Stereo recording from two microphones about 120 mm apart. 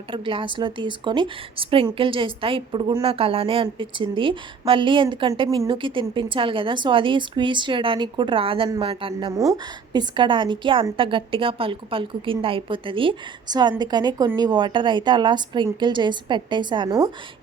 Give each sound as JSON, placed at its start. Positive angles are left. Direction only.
{"t": 0.1, "sound": "a woman's voice", "side_deg": -45}
{"t": 5.5, "sound": "a woman's voice", "side_deg": -30}
{"t": 5.7, "sound": "a woman's voice", "side_deg": -45}